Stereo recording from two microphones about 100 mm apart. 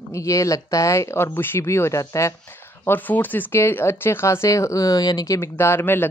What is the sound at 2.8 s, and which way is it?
Speech, 20° left (ahead or behind).